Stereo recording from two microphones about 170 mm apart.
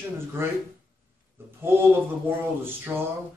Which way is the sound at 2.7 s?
15° right (ahead or behind).